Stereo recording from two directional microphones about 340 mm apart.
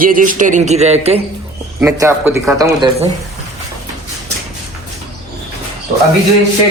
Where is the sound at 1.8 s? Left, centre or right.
Centre.